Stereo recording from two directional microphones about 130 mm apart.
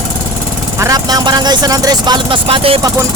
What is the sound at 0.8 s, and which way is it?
Speech, 30° right (ahead or behind).